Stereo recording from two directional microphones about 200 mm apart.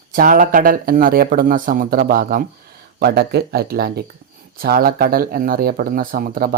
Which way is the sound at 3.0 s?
55° right (ahead or behind).